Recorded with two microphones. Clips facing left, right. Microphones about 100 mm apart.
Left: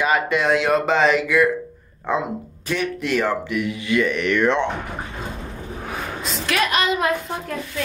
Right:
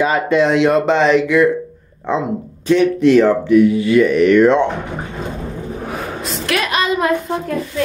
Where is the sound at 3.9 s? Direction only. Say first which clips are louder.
Right 7 dB; 20° right (ahead or behind).